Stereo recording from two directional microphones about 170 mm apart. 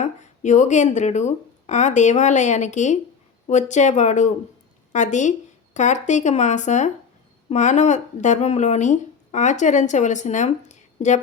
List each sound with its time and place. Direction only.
0.0 s speech: 45° left (ahead or behind)